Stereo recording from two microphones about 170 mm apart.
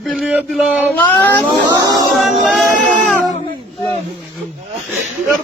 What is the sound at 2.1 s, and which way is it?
Music, centre (ahead or behind).